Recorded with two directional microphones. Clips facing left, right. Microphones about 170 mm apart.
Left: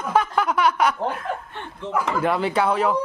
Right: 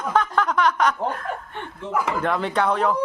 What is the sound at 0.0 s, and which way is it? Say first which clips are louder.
Snicker: left 1 dB; 10° left (ahead or behind).